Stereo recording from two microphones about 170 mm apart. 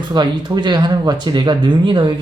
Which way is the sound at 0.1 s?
25° right (ahead or behind).